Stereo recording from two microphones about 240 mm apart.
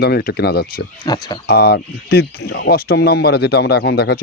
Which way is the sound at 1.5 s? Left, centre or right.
Left.